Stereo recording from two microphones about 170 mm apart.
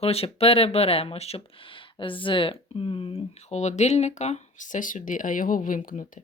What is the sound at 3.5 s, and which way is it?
Speech, 40° left (ahead or behind).